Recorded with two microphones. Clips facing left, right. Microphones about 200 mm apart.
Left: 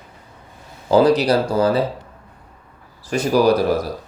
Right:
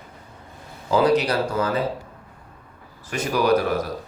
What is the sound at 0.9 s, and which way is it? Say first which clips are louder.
Speech: left 5 dB; 35° left (ahead or behind).